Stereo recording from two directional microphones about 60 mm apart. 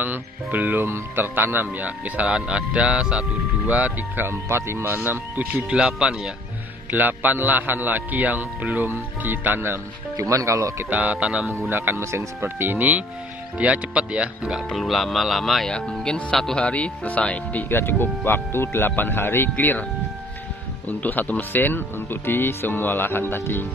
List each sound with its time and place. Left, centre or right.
0.0 s a man's voice: right
1.9 s speech: right
4.3 s a man's voice: right
5.7 s speech: centre
6.9 s a man's voice: right
10.1 s speech: right
10.9 s speech: right
11.7 s speech: right
12.4 s speech: right; by 14.6 s centre
14.8 s speech: centre
15.7 s speech: centre
16.6 s speech: left
17.6 s speech: left
21.0 s speech: left